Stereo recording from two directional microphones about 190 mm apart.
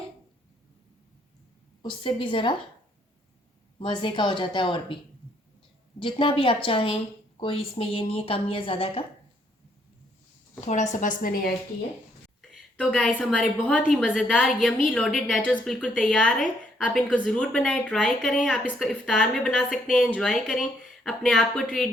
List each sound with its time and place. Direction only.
1.8 s a woman's voice: 25° left (ahead or behind)
3.8 s a woman's voice: 25° left (ahead or behind)
6.0 s a woman's voice: 25° left (ahead or behind)
10.7 s a woman's voice: 40° left (ahead or behind)
12.4 s a sound: centre (ahead or behind)
13.3 s a woman's voice: 5° left (ahead or behind)